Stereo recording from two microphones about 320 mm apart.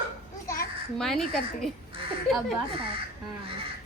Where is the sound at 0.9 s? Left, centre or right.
Centre.